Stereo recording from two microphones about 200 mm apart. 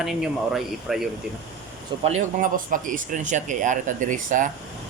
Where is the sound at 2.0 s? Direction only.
40° right (ahead or behind).